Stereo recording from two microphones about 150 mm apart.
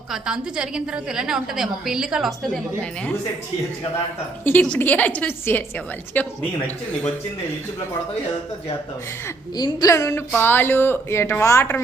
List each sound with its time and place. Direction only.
0.1 s a woman's voice: 5° right (ahead or behind)
4.4 s a woman's voice: 10° left (ahead or behind)
9.2 s a woman's voice: 25° left (ahead or behind)